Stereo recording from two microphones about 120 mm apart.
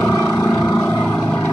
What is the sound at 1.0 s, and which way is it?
Vehicle, 10° left (ahead or behind).